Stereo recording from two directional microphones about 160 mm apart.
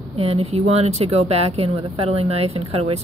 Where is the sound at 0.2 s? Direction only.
40° right (ahead or behind).